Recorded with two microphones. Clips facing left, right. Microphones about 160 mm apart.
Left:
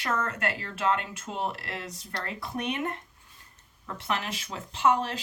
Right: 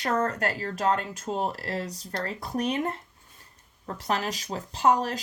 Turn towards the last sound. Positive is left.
turn(degrees=-40)  # may be behind; listen again after turning